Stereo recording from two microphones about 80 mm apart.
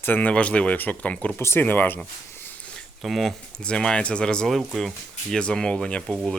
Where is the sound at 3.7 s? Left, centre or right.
Centre.